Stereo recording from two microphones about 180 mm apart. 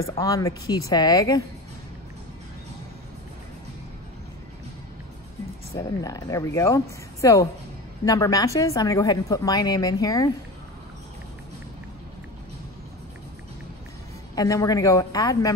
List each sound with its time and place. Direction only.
0.0 s speech: 20° left (ahead or behind)
5.8 s speech: 20° left (ahead or behind)
14.3 s speech: 20° left (ahead or behind)